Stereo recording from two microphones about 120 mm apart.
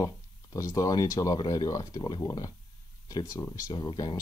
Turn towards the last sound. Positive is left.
turn(degrees=30)  # may be behind; listen again after turning